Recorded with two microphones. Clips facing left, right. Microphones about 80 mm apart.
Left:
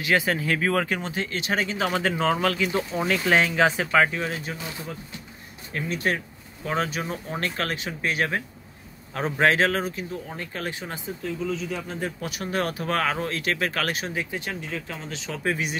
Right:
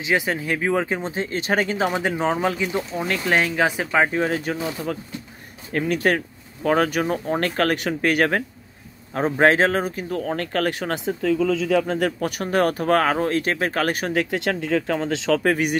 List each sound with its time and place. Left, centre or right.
0.0 s speech: centre; by 1.9 s right
1.9 s speech: centre
3.0 s speech: centre
4.1 s speech: right
5.7 s speech: right
9.1 s speech: right
10.1 s speech: right
12.2 s speech: right
14.0 s speech: right